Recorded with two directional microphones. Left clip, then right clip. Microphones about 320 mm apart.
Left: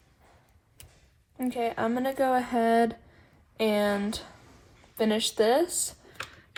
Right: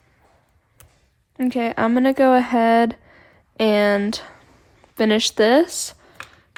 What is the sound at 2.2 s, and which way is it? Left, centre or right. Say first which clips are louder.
Speech: right 9 dB; right.